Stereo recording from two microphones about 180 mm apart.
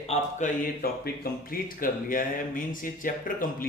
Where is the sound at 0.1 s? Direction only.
45° left (ahead or behind).